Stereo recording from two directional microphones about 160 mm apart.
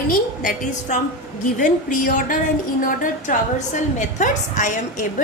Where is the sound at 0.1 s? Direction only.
55° left (ahead or behind).